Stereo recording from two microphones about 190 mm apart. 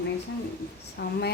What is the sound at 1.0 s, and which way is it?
Speech, 60° left (ahead or behind).